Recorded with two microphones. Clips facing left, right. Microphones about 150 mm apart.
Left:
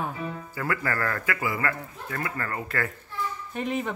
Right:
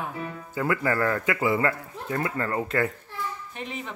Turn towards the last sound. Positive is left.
turn(degrees=50)  # may be behind; listen again after turning